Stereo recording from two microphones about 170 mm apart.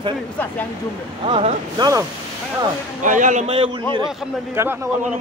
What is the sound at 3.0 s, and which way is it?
Speech, 50° right (ahead or behind).